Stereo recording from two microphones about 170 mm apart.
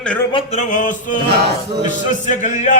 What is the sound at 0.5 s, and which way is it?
Speech, 50° left (ahead or behind).